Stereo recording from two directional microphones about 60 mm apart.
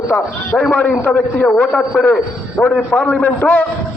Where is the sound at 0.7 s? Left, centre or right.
Left.